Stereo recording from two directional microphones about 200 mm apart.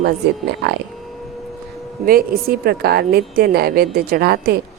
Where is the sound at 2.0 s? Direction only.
45° right (ahead or behind).